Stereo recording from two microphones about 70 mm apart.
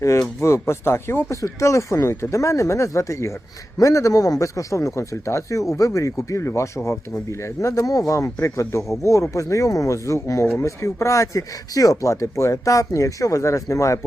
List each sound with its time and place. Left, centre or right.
0.3 s speech: left